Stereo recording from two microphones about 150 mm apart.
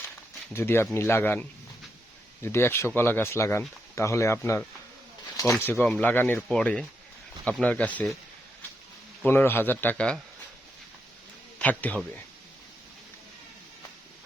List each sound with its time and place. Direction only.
0.5 s speech: 15° left (ahead or behind)
5.7 s speech: 5° left (ahead or behind)
9.2 s speech: 15° left (ahead or behind)
11.6 s speech: 10° left (ahead or behind)